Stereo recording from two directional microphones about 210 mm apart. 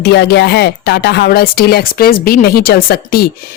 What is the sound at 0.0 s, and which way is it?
A woman's voice, 50° left (ahead or behind).